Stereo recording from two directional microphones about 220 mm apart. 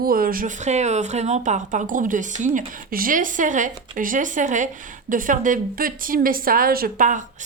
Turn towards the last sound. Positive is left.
turn(degrees=-35)  # may be behind; listen again after turning